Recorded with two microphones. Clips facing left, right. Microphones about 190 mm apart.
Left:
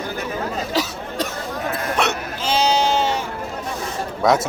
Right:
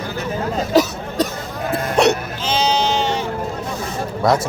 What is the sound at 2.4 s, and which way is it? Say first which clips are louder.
Sheep: left 1 dB; 10° left (ahead or behind).